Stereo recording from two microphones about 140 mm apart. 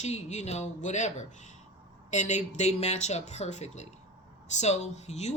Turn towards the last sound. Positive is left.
turn(degrees=55)  # may be behind; listen again after turning